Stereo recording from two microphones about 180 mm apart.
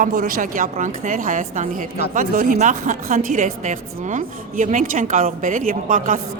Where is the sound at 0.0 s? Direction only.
50° right (ahead or behind).